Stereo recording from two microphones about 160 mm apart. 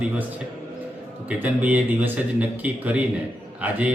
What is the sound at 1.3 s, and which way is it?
Speech, 10° right (ahead or behind).